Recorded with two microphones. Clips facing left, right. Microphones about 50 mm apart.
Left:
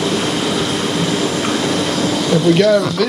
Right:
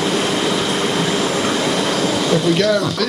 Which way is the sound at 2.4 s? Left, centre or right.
Centre.